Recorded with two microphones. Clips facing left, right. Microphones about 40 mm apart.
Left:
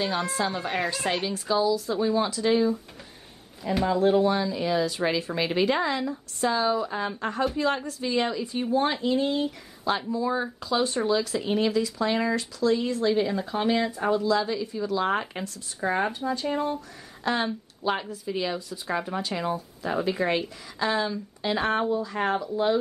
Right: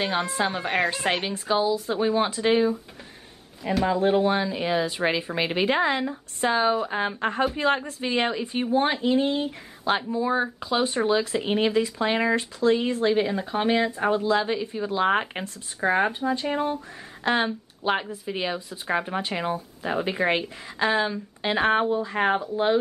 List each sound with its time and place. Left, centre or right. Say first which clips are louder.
0.0 s speech: right 2 dB; right
3.8 s speech: even; right